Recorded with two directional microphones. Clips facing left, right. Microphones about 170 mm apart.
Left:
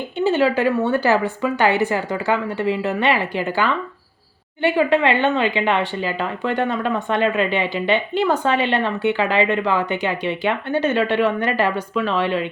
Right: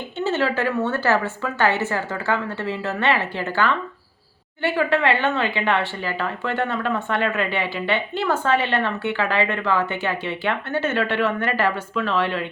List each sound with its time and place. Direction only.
0.2 s speech: 15° left (ahead or behind)